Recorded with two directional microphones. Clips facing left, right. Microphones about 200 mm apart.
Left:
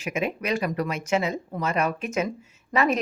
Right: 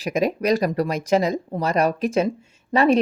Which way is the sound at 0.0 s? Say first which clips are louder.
Right 6 dB; 35° right (ahead or behind).